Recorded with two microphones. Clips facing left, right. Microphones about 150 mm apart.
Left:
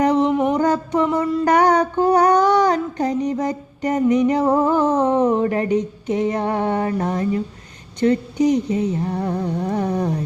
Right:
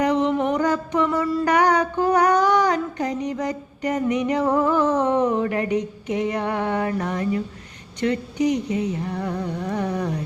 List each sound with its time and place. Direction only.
0.2 s mantra: 5° left (ahead or behind)
0.5 s music: 35° left (ahead or behind)
1.0 s music: 20° left (ahead or behind)
1.5 s female singing: 35° left (ahead or behind)
8.0 s speech: 35° left (ahead or behind)